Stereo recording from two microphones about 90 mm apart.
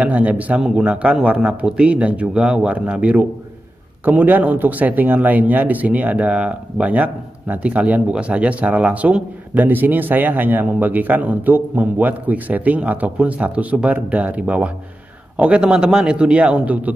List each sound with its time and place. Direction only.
0.0 s a man's voice: 15° right (ahead or behind)